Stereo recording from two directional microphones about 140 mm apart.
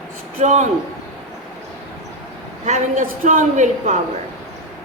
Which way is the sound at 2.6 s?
60° right (ahead or behind).